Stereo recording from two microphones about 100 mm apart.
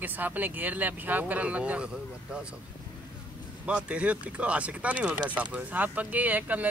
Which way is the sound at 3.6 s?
10° right (ahead or behind).